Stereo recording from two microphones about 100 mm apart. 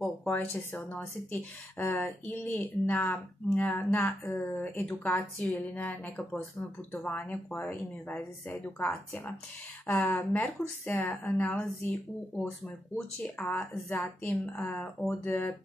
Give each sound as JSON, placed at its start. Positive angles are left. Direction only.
{"t": 0.3, "sound": "speech", "side_deg": 20}
{"t": 9.8, "sound": "speech", "side_deg": 15}